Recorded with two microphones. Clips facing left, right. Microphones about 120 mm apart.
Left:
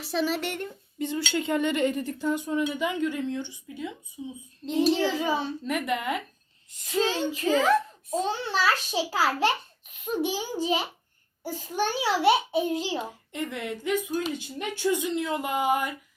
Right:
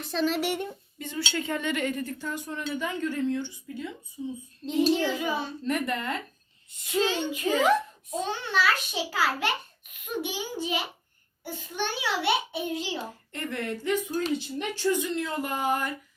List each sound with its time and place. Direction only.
0.0 s dishes: 5° left (ahead or behind)
0.3 s speech: 10° right (ahead or behind)
0.9 s dishes: 15° left (ahead or behind)
4.2 s child singing: 20° left (ahead or behind)
4.6 s dishes: 10° left (ahead or behind)
7.0 s a child's voice: 35° left (ahead or behind)
13.0 s dishes: 15° left (ahead or behind)